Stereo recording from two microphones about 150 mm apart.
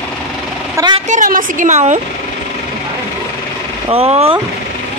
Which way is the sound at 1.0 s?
60° right (ahead or behind).